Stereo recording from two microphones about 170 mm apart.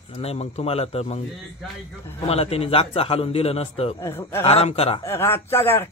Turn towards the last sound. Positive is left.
turn(degrees=15)  # may be behind; listen again after turning